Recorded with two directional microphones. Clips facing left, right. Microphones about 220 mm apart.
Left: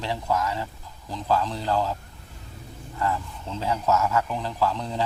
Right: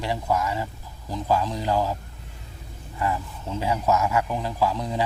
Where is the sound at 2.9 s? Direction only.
15° right (ahead or behind).